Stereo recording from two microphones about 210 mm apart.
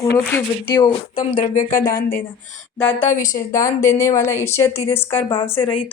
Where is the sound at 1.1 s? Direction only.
30° left (ahead or behind).